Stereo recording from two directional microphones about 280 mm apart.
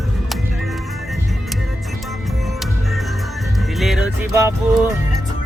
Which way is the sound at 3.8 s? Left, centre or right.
Centre.